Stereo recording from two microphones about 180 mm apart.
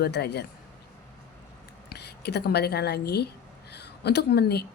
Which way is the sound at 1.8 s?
65° left (ahead or behind).